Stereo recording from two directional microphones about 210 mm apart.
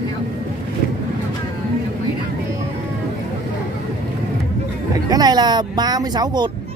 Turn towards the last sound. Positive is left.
turn(degrees=-20)  # may be behind; listen again after turning